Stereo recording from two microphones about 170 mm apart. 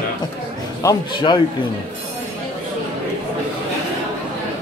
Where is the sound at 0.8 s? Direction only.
25° left (ahead or behind).